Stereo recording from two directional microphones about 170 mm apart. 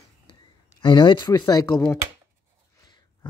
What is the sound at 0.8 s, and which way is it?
Speech, 30° left (ahead or behind).